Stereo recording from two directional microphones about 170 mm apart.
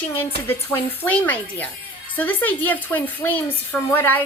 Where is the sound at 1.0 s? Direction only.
10° left (ahead or behind).